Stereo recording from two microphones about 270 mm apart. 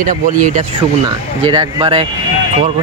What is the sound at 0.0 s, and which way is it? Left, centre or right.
Speech, right.